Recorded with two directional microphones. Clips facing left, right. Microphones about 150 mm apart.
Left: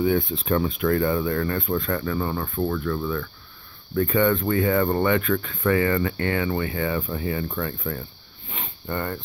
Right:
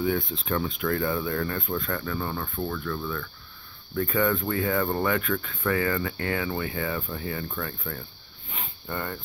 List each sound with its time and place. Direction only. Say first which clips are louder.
0.0 s speech: left 5 dB; 10° left (ahead or behind)
4.1 s speech: left 4 dB; centre (ahead or behind)
8.5 s sniff: left 4 dB; 5° left (ahead or behind)